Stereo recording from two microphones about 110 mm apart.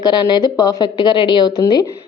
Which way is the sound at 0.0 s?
40° left (ahead or behind).